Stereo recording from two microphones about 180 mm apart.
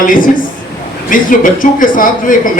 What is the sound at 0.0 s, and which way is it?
Speech, 50° left (ahead or behind).